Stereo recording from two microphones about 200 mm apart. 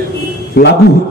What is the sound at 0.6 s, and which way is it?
Speech, 55° left (ahead or behind).